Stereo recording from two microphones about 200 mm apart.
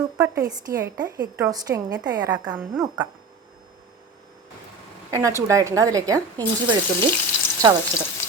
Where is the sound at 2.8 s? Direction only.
20° right (ahead or behind).